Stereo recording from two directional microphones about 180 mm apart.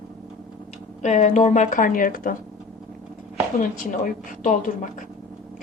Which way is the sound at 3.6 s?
45° left (ahead or behind).